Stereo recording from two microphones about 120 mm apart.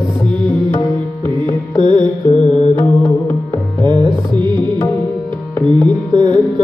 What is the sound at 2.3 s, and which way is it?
Music, 65° left (ahead or behind).